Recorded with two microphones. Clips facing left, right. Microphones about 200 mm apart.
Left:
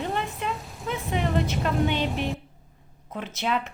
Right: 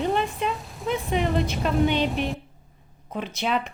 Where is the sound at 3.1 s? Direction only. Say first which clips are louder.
Right 2 dB; 15° right (ahead or behind).